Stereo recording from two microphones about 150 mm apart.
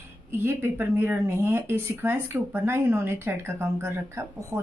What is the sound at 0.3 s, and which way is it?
Speech, 15° right (ahead or behind).